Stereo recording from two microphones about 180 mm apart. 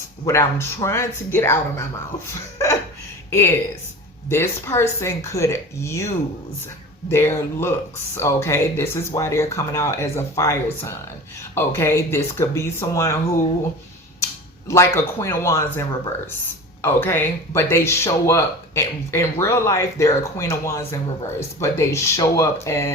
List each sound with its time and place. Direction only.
0.3 s speech: 15° left (ahead or behind)
7.1 s speech: 15° left (ahead or behind)
14.7 s speech: 15° left (ahead or behind)